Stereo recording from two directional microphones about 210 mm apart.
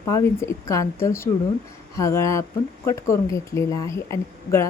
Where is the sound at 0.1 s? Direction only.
15° left (ahead or behind).